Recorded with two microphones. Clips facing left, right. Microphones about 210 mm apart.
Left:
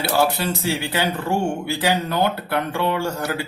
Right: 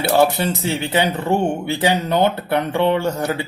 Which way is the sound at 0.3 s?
20° right (ahead or behind).